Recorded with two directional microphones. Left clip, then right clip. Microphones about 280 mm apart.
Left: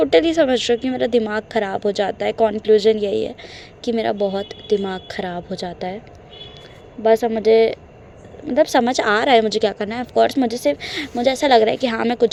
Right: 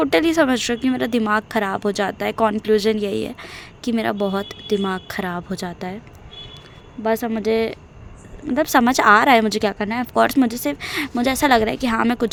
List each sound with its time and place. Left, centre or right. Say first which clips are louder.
0.0 s a woman's voice: left 2 dB; right
7.0 s a woman's voice: left 6 dB; right